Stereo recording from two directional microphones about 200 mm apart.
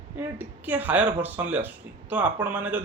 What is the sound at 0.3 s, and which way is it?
A man's voice, 10° right (ahead or behind).